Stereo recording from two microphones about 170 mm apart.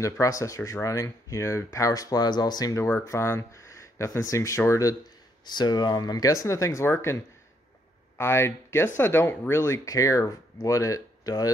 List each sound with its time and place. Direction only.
0.0 s speech: 20° left (ahead or behind)
8.2 s speech: 15° left (ahead or behind)